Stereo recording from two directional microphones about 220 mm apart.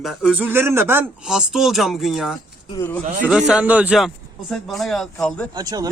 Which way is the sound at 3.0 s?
30° right (ahead or behind).